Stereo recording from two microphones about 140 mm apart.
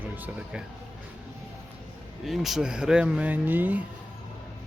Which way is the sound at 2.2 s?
Centre (ahead or behind).